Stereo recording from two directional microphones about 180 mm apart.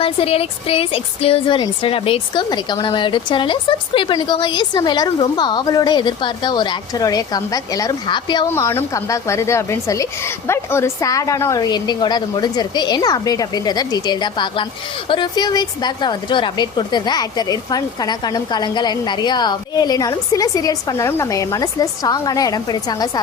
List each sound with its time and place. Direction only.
0.0 s a woman's voice: 30° left (ahead or behind)
8.4 s a woman's voice: 15° left (ahead or behind)